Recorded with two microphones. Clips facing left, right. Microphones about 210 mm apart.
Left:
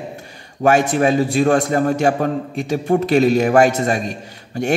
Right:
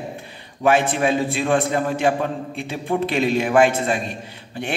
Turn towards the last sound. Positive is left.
turn(degrees=40)  # may be behind; listen again after turning